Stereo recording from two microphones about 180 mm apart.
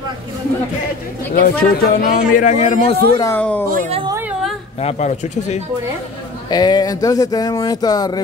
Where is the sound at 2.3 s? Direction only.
40° left (ahead or behind).